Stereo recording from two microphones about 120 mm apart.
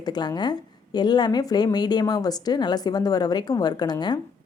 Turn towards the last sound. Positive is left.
turn(degrees=35)  # may be behind; listen again after turning